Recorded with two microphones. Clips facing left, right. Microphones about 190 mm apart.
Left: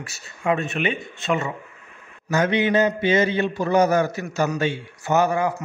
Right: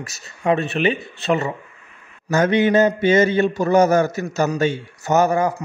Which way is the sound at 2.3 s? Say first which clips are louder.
Right 4 dB; 45° right (ahead or behind).